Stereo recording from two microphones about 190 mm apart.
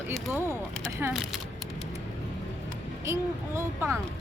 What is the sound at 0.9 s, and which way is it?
Speech, 15° right (ahead or behind).